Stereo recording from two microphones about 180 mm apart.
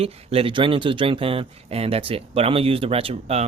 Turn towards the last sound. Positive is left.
turn(degrees=-35)  # may be behind; listen again after turning